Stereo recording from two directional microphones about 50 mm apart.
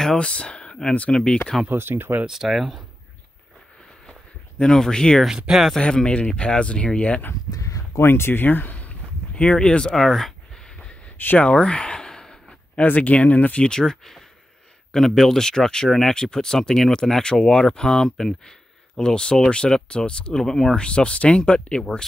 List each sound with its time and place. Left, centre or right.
0.2 s speech: left
1.7 s speech: right
2.2 s speech: centre
4.1 s a sound: centre
5.5 s speech: centre
5.8 s speech: centre
8.0 s speech: left; by 9.9 s centre
9.9 s a sound: centre
12.8 s speech: left
13.7 s speech: centre
20.8 s speech: left